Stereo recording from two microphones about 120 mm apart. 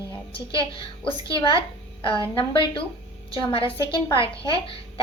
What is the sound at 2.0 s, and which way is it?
Speech, 45° left (ahead or behind).